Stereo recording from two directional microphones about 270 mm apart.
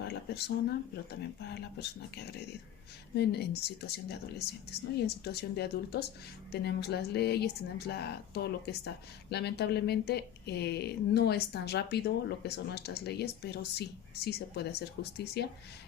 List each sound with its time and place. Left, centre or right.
0.0 s speech: left